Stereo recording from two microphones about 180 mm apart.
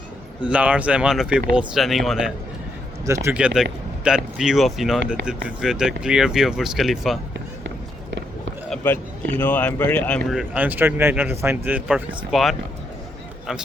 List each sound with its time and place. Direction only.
0.4 s speech: 5° right (ahead or behind)
3.1 s speech: 15° right (ahead or behind)
3.3 s speech: 5° right (ahead or behind)
8.7 s speech: 10° left (ahead or behind)
10.3 s speech: 10° right (ahead or behind)